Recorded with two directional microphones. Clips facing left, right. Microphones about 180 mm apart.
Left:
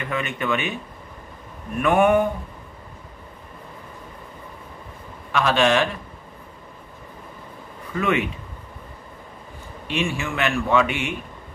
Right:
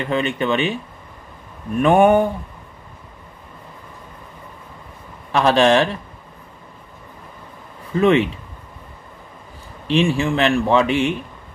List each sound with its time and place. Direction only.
0.0 s speech: 30° right (ahead or behind)
1.8 s speech: 30° right (ahead or behind)
5.3 s speech: 35° right (ahead or behind)
7.9 s speech: 30° right (ahead or behind)
9.8 s speech: 30° right (ahead or behind)